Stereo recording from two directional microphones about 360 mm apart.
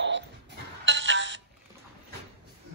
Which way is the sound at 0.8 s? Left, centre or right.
Right.